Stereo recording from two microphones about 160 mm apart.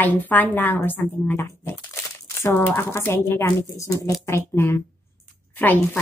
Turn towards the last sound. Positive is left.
turn(degrees=10)  # may be behind; listen again after turning